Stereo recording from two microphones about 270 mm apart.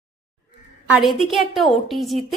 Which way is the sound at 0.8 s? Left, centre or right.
Centre.